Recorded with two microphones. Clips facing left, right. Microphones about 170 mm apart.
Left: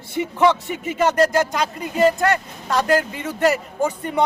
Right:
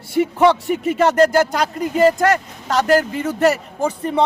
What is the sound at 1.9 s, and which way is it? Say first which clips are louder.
Speech: right 2 dB; 35° right (ahead or behind).